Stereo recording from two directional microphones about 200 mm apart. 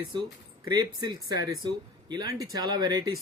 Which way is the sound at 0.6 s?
15° right (ahead or behind).